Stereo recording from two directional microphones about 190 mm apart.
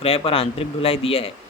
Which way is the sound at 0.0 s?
30° left (ahead or behind).